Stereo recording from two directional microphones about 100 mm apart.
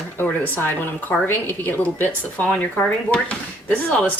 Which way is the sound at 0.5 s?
20° left (ahead or behind).